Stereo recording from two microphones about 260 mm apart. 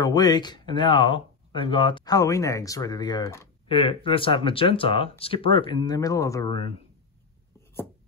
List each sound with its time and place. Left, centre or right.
0.0 s speech: centre